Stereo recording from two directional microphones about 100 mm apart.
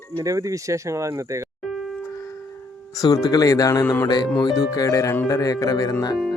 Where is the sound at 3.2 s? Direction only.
35° left (ahead or behind).